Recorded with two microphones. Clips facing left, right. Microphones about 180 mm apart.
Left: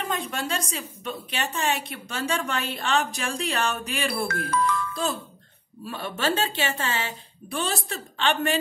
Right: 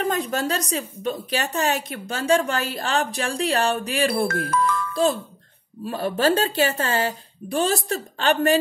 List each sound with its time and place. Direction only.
0.1 s a woman's voice: 35° right (ahead or behind)